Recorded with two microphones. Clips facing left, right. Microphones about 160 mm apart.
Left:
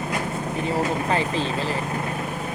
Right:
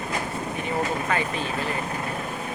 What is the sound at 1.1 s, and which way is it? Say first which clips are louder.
Speech: left 3 dB; 30° left (ahead or behind).